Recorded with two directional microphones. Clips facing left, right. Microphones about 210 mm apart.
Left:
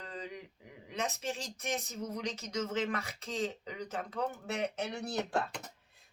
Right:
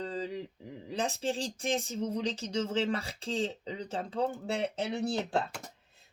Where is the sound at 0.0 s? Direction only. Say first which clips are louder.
Right 8 dB; 30° right (ahead or behind).